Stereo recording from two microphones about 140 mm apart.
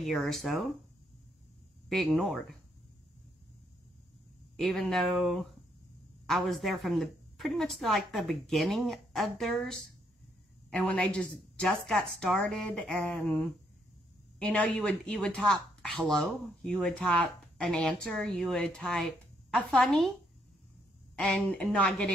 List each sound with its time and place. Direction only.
0.1 s a woman's voice: centre (ahead or behind)
2.1 s a woman's voice: centre (ahead or behind)
4.6 s a woman's voice: centre (ahead or behind)
21.2 s speech: 10° left (ahead or behind)